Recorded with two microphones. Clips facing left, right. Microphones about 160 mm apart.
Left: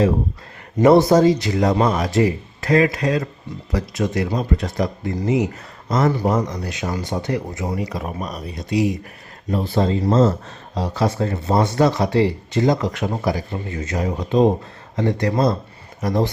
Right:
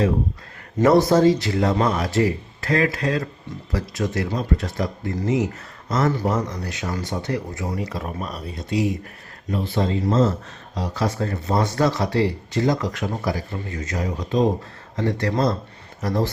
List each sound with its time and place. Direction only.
0.8 s speech: 15° left (ahead or behind)
9.5 s speech: 35° left (ahead or behind)
10.8 s speech: 25° left (ahead or behind)
14.9 s speech: 15° left (ahead or behind)